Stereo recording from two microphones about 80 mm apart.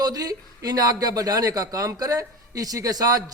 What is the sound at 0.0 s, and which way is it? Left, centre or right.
Speech, right.